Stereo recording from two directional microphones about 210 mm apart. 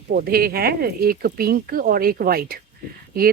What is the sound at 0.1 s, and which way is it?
Speech, 45° right (ahead or behind).